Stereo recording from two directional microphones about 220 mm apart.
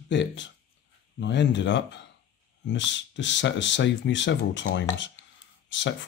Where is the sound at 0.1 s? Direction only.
55° left (ahead or behind).